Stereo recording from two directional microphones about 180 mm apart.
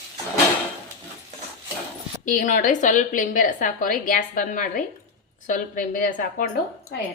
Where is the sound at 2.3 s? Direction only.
45° left (ahead or behind).